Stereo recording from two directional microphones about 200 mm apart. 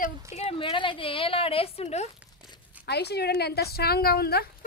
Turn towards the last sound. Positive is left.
turn(degrees=50)  # may be behind; listen again after turning